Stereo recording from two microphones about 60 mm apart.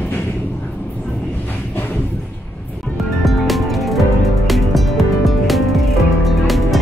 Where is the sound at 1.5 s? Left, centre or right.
Left.